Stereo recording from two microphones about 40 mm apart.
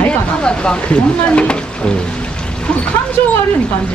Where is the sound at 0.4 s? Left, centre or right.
Left.